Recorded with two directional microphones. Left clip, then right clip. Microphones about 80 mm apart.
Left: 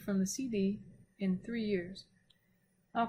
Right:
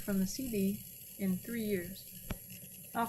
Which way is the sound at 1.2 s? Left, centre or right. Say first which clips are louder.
Left 1 dB; left.